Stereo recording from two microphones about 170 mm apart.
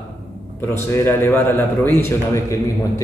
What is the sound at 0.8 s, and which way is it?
Speech, 15° left (ahead or behind).